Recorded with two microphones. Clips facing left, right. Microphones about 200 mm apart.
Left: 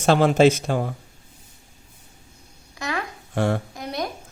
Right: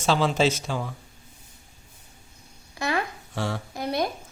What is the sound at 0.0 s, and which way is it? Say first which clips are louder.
Speech: left 6 dB; 55° left (ahead or behind).